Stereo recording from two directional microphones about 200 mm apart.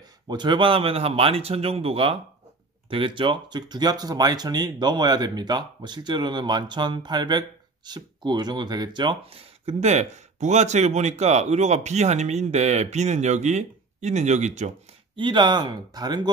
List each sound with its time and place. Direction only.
0.3 s speech: 25° right (ahead or behind)
15.1 s speech: 25° right (ahead or behind)